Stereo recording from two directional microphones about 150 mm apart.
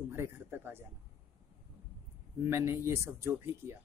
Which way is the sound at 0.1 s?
15° right (ahead or behind).